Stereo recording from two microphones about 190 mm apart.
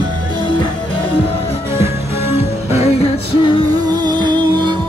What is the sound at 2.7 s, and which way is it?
Music, 35° left (ahead or behind).